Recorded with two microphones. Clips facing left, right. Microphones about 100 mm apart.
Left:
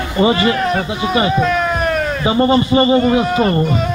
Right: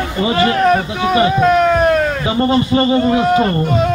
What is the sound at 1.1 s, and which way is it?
Speech, 45° right (ahead or behind).